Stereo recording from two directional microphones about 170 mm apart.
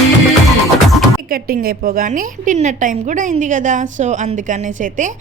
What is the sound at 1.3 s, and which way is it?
A woman's voice, 60° right (ahead or behind).